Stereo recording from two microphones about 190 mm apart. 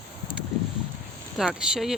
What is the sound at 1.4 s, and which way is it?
Speech, 5° right (ahead or behind).